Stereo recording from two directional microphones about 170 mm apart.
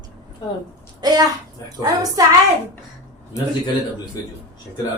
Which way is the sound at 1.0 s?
25° right (ahead or behind).